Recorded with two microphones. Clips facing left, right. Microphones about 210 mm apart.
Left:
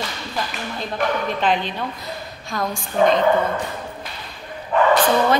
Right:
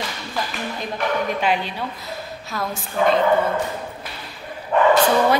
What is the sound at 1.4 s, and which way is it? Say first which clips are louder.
Speech: left 1 dB; 10° right (ahead or behind).